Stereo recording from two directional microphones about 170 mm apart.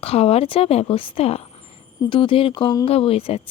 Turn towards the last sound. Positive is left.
turn(degrees=35)  # may be behind; listen again after turning